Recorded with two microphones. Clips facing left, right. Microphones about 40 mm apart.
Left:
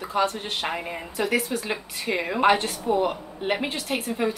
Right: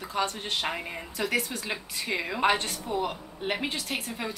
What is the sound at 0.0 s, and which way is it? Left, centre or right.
A woman's voice, centre.